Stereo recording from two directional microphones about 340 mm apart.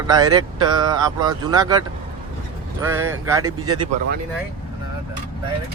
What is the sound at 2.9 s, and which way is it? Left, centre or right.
Speech, right.